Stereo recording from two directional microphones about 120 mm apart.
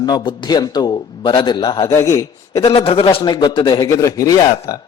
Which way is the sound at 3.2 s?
35° left (ahead or behind).